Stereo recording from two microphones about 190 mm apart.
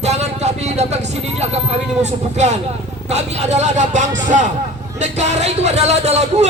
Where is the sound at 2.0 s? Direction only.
35° right (ahead or behind).